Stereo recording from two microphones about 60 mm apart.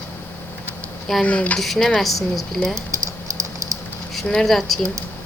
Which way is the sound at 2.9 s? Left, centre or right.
Right.